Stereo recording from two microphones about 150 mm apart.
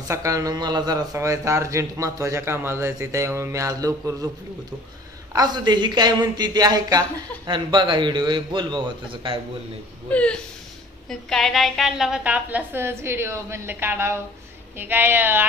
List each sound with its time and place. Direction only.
0.1 s a man's voice: 20° right (ahead or behind)
5.3 s a man's voice: 25° right (ahead or behind)
10.1 s a woman's voice: 5° left (ahead or behind); by 15.4 s 15° right (ahead or behind)